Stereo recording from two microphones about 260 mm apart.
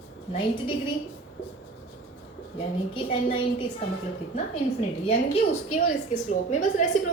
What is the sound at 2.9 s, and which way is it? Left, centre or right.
Speech, left.